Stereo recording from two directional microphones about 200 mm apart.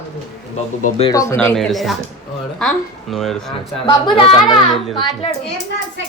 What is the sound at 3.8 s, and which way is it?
A child's voice, 25° left (ahead or behind).